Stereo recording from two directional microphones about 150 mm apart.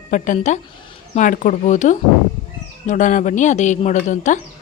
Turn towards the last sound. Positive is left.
turn(degrees=55)  # may be behind; listen again after turning